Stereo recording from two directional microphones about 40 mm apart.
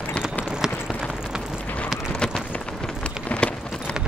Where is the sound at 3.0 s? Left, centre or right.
Left.